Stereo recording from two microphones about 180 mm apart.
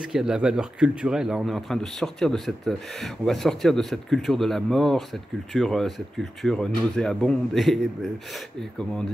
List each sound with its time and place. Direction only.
0.0 s speech: 5° right (ahead or behind)